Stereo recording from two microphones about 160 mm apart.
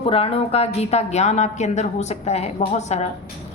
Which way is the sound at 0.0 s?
35° left (ahead or behind).